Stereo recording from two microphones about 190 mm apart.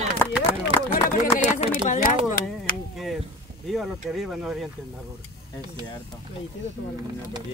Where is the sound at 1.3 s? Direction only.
35° left (ahead or behind).